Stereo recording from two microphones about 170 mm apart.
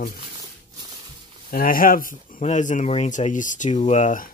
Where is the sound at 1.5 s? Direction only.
55° left (ahead or behind).